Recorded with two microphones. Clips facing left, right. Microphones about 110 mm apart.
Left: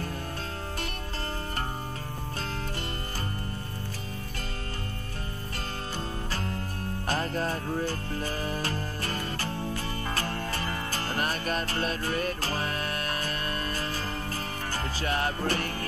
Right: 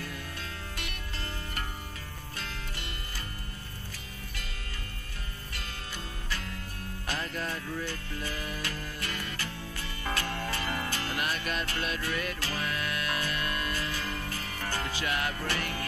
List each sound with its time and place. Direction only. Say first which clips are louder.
6.3 s music: left 6 dB; 35° left (ahead or behind)